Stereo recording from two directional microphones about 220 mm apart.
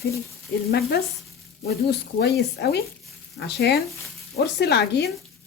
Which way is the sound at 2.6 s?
50° left (ahead or behind).